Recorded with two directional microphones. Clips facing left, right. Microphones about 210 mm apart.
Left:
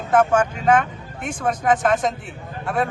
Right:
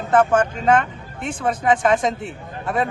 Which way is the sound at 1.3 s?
5° right (ahead or behind).